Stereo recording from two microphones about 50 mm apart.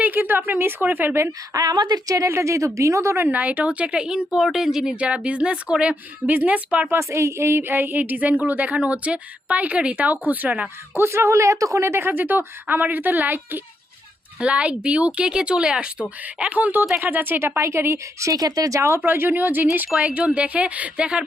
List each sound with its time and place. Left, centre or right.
0.0 s speech: right
2.1 s speech: right
3.2 s speech: right; by 4.9 s centre
4.9 s speech: right
6.2 s speech: right
6.9 s speech: right
10.1 s speech: right
10.9 s a woman's voice: right
14.3 s speech: right
17.6 s speech: right
19.0 s a woman's voice: right
20.0 s speech: right